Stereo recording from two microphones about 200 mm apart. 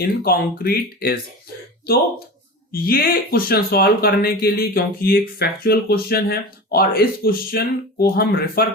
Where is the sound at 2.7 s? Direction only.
45° left (ahead or behind).